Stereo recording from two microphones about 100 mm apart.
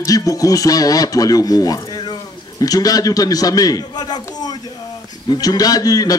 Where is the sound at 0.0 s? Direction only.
35° left (ahead or behind).